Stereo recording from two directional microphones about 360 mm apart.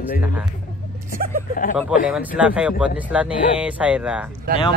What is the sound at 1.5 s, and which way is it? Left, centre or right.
Speech, left.